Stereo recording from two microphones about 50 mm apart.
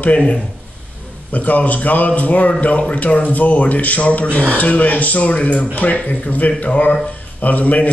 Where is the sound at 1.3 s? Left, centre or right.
Left.